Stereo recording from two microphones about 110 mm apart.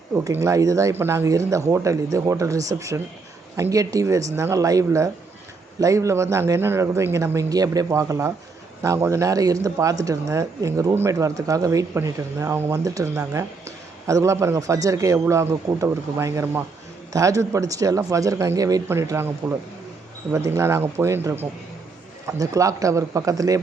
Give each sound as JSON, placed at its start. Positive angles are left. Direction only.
{"t": 0.1, "sound": "a man's voice", "side_deg": -30}
{"t": 17.1, "sound": "a man's voice", "side_deg": -30}